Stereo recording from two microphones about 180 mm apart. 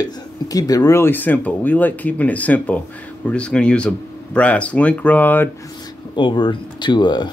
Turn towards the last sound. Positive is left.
turn(degrees=25)  # may be behind; listen again after turning